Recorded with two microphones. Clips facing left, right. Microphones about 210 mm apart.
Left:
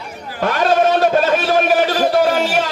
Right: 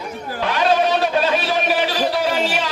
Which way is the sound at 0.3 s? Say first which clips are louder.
Left 3 dB; 45° left (ahead or behind).